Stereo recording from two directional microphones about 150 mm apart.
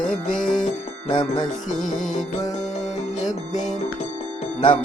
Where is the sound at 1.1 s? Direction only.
35° left (ahead or behind).